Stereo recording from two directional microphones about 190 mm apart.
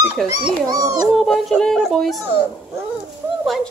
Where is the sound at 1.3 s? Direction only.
Centre (ahead or behind).